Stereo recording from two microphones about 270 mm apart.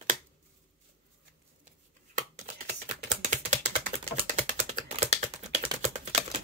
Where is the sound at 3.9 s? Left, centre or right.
Right.